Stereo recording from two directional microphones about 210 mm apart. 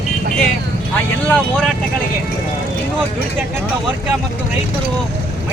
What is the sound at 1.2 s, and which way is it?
Speech, 5° left (ahead or behind).